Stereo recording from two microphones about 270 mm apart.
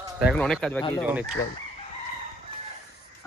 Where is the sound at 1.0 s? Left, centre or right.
Centre.